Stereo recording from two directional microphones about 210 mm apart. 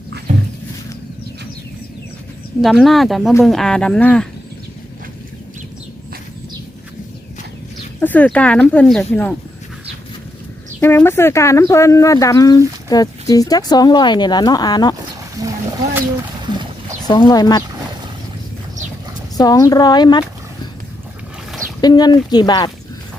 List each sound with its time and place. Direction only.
2.6 s speech: centre (ahead or behind)
8.0 s speech: 5° left (ahead or behind)
10.8 s speech: 10° left (ahead or behind)
15.4 s speech: 15° right (ahead or behind)
17.1 s speech: 20° left (ahead or behind)
19.4 s speech: 15° left (ahead or behind)
21.8 s speech: 20° left (ahead or behind)